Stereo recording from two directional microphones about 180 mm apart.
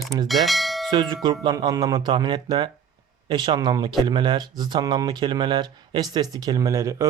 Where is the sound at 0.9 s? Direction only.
25° right (ahead or behind).